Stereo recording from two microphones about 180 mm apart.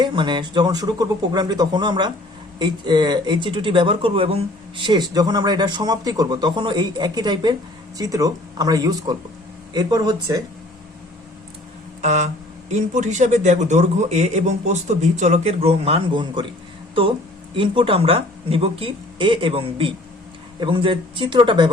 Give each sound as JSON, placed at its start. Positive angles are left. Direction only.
{"t": 0.0, "sound": "speech", "side_deg": -25}
{"t": 12.0, "sound": "speech", "side_deg": -40}